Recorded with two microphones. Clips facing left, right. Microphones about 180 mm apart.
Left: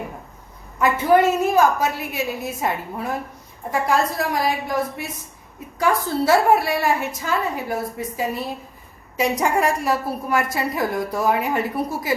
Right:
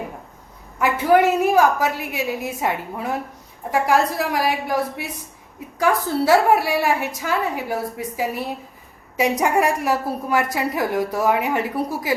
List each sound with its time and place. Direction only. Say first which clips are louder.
0.8 s a woman's voice: even; 10° right (ahead or behind)